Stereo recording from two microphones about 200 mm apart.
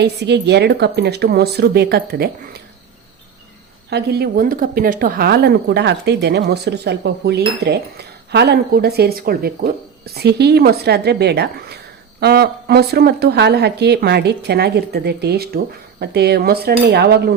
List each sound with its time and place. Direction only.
0.0 s speech: 55° right (ahead or behind)
3.8 s a woman's voice: 55° right (ahead or behind)